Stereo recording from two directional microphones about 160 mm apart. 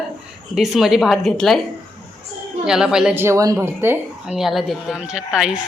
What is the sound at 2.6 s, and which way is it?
Speech, 5° right (ahead or behind).